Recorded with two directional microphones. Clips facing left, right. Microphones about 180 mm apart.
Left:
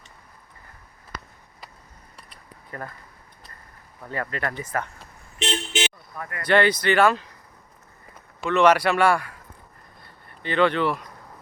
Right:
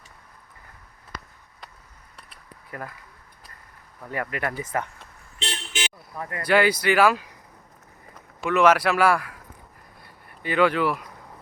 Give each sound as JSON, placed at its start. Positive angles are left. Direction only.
{"t": 2.1, "sound": "a sound", "side_deg": -5}
{"t": 4.1, "sound": "speech", "side_deg": -15}
{"t": 5.4, "sound": "vehicle", "side_deg": 20}
{"t": 6.1, "sound": "speech", "side_deg": -25}
{"t": 6.4, "sound": "speech", "side_deg": -5}
{"t": 8.4, "sound": "a man's voice", "side_deg": -5}
{"t": 10.0, "sound": "a sound", "side_deg": -10}